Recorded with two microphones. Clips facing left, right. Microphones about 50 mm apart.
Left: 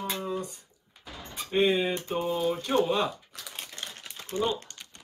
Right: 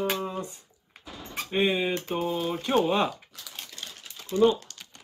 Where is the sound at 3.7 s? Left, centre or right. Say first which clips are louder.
Left 2 dB; left.